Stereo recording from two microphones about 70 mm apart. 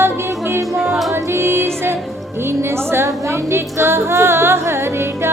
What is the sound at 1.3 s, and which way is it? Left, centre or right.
Music, right.